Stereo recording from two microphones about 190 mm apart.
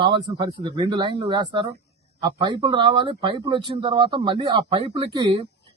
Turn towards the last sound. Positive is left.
turn(degrees=-30)  # may be behind; listen again after turning